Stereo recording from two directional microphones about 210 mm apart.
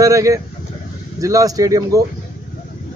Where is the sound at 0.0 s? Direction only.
15° right (ahead or behind).